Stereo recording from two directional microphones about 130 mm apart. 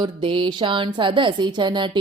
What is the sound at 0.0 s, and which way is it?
Speech, 40° right (ahead or behind).